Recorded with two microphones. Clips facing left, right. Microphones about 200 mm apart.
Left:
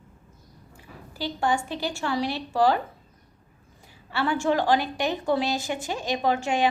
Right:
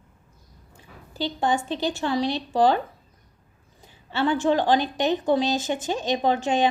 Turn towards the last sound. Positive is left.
turn(degrees=-20)  # may be behind; listen again after turning